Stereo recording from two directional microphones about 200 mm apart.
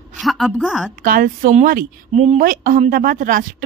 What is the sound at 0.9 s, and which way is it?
A woman's voice, 45° right (ahead or behind).